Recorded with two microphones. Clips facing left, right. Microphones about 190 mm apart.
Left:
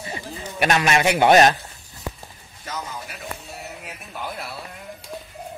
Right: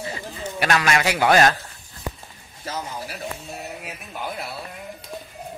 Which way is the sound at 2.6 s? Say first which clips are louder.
Right 2 dB; 30° right (ahead or behind).